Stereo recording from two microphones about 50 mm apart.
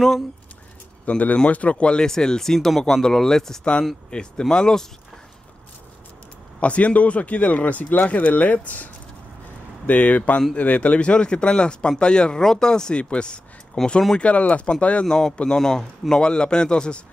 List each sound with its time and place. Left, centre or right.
1.0 s speech: left; by 4.8 s centre
6.6 s speech: left
14.1 s speech: left
15.0 s speech: centre